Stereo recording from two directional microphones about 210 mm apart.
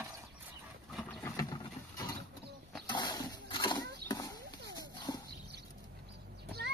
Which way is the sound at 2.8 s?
20° left (ahead or behind).